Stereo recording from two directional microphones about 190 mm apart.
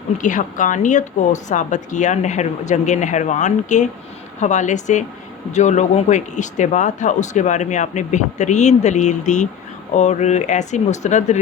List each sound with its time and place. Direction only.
0.2 s speech: 40° left (ahead or behind)